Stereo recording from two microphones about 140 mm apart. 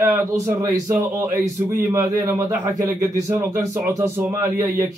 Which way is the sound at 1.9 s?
20° right (ahead or behind).